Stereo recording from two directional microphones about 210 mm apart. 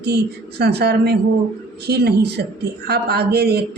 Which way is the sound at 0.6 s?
50° right (ahead or behind).